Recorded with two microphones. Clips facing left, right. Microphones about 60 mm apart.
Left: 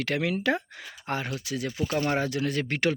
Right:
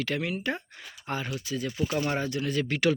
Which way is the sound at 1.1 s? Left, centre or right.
Left.